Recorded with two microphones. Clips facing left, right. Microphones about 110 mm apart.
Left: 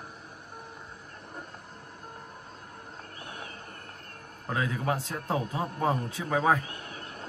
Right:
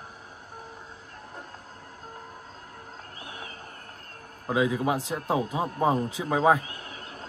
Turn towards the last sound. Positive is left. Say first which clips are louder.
# right 3 dB
turn(degrees=-15)  # may be behind; listen again after turning